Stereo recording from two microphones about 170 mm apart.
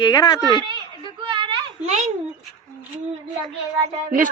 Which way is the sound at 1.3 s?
30° right (ahead or behind).